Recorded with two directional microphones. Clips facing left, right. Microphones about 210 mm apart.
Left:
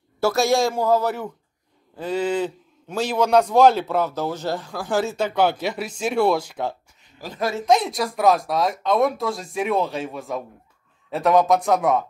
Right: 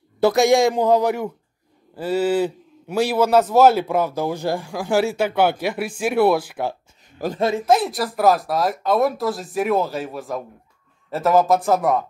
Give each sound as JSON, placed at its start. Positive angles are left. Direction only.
{"t": 0.2, "sound": "a man's voice", "side_deg": -15}
{"t": 7.3, "sound": "a man's voice", "side_deg": -25}
{"t": 7.6, "sound": "speech", "side_deg": -5}